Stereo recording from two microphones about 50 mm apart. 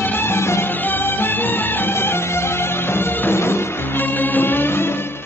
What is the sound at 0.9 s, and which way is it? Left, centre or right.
Music, left.